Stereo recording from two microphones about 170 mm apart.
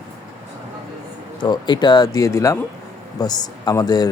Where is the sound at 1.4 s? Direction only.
25° left (ahead or behind).